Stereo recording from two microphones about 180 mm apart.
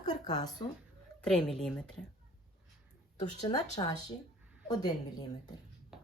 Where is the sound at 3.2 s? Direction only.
25° left (ahead or behind).